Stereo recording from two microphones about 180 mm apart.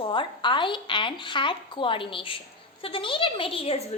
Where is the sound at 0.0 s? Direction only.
25° left (ahead or behind).